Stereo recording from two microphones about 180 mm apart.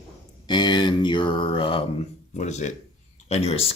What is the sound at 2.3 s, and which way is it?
Speech, 40° left (ahead or behind).